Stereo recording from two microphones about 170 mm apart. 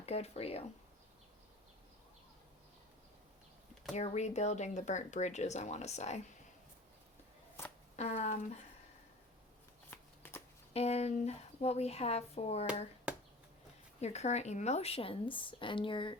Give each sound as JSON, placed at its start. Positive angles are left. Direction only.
{"t": 0.0, "sound": "speech", "side_deg": 35}
{"t": 3.9, "sound": "speech", "side_deg": 40}
{"t": 7.6, "sound": "a sound", "side_deg": 15}
{"t": 7.9, "sound": "speech", "side_deg": 40}
{"t": 9.9, "sound": "shuffling cards", "side_deg": 10}
{"t": 10.8, "sound": "speech", "side_deg": 40}
{"t": 14.0, "sound": "speech", "side_deg": 40}